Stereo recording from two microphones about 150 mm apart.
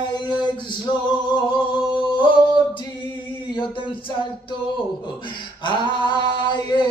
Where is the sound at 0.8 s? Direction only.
30° left (ahead or behind).